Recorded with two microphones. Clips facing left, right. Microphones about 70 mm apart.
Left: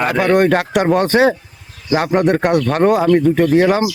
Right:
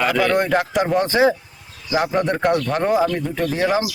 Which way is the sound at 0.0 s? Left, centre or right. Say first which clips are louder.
Left 5 dB; left.